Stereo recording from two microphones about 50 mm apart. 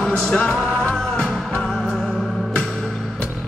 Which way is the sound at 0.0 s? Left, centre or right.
Centre.